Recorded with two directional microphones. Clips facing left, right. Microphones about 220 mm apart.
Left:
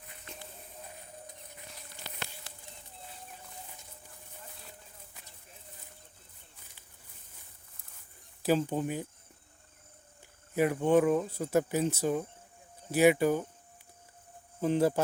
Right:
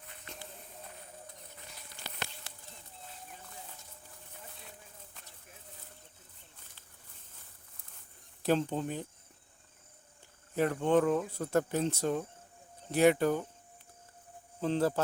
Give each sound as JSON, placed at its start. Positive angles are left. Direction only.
{"t": 8.4, "sound": "speech", "side_deg": 5}
{"t": 10.5, "sound": "speech", "side_deg": 10}
{"t": 14.6, "sound": "speech", "side_deg": 15}